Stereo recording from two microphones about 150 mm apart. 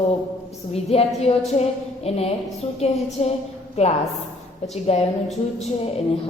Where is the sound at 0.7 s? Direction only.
40° left (ahead or behind).